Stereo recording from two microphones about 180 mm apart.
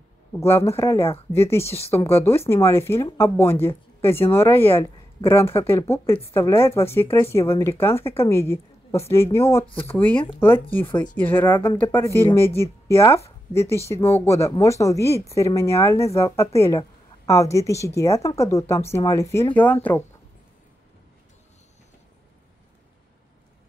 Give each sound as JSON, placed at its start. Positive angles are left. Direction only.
{"t": 0.3, "sound": "speech", "side_deg": 15}
{"t": 8.0, "sound": "speech", "side_deg": 30}
{"t": 8.3, "sound": "a woman's voice", "side_deg": 15}